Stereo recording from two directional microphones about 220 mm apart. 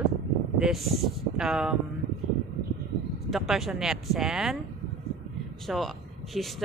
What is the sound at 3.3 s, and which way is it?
A woman's voice, centre (ahead or behind).